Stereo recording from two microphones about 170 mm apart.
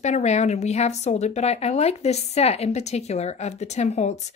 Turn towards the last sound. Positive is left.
turn(degrees=40)  # may be behind; listen again after turning